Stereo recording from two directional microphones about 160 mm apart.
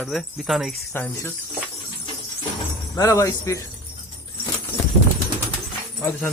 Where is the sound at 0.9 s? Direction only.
15° left (ahead or behind).